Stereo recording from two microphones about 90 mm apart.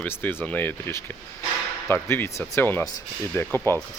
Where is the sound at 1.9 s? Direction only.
25° left (ahead or behind).